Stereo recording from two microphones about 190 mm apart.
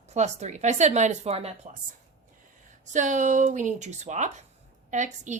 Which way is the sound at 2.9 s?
40° right (ahead or behind).